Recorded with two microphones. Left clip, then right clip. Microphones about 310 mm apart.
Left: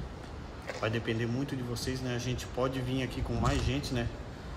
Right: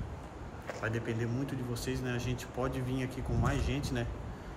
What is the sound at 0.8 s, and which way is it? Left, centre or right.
Speech, centre.